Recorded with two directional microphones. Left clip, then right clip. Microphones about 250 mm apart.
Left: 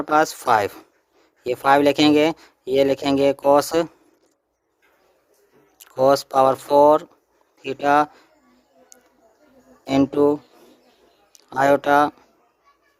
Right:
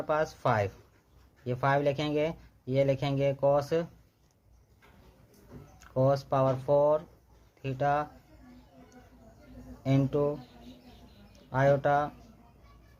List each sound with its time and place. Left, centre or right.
0.1 s speech: left
6.0 s speech: left
9.8 s speech: left
11.6 s speech: left